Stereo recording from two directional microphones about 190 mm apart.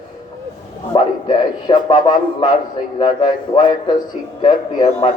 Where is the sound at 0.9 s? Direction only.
20° left (ahead or behind).